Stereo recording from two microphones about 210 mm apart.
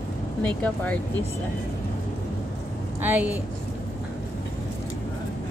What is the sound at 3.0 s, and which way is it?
Speech, 10° right (ahead or behind).